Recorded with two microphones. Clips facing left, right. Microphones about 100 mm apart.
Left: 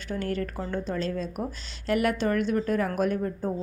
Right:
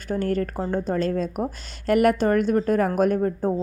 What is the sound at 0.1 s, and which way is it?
A woman's voice, 45° right (ahead or behind).